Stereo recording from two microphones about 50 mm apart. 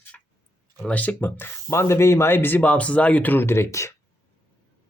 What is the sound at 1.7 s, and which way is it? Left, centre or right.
Speech, left.